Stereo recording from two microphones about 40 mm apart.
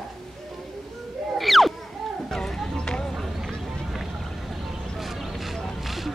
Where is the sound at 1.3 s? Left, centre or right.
Centre.